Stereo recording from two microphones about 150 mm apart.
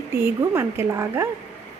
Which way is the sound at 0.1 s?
15° right (ahead or behind).